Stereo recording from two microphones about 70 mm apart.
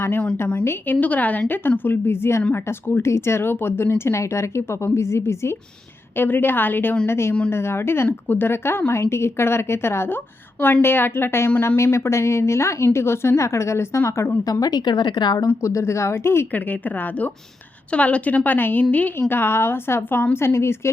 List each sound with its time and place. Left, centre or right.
0.6 s a woman's voice: left
14.4 s a woman's voice: left
15.4 s a woman's voice: left
16.5 s a woman's voice: left